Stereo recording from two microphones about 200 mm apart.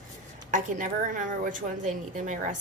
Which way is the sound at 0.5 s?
40° right (ahead or behind).